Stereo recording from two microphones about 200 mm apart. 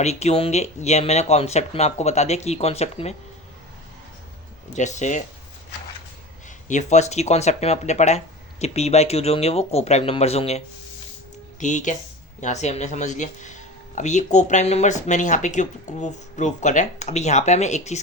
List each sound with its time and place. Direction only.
0.0 s speech: 35° left (ahead or behind)
4.7 s speech: 35° left (ahead or behind)
6.7 s speech: 35° left (ahead or behind)
11.6 s speech: 40° left (ahead or behind)